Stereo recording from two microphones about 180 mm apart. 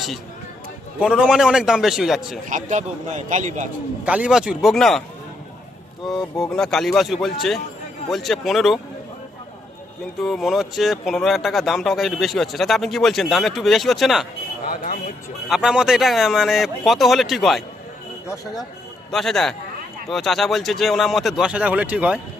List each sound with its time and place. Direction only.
0.9 s speech: 5° right (ahead or behind)
2.5 s a man's voice: 45° right (ahead or behind)
4.0 s speech: 5° right (ahead or behind)
6.0 s speech: centre (ahead or behind)
10.2 s speech: centre (ahead or behind)
14.7 s speech: 55° left (ahead or behind)
15.4 s speech: centre (ahead or behind)
19.1 s speech: centre (ahead or behind)